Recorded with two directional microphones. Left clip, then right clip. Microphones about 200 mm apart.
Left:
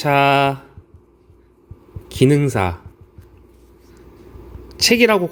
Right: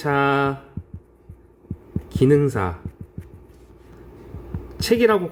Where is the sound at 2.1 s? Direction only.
20° left (ahead or behind).